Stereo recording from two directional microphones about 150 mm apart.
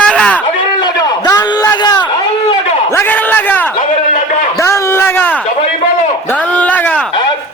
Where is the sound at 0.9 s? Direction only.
25° left (ahead or behind).